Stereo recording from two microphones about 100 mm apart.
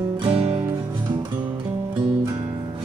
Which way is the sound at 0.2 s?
80° right.